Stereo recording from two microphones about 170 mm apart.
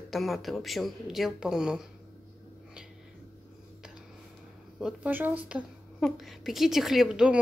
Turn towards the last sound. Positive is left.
turn(degrees=-5)  # may be behind; listen again after turning